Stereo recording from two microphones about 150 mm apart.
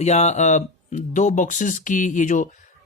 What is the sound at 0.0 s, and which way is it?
A woman's voice, 50° left (ahead or behind).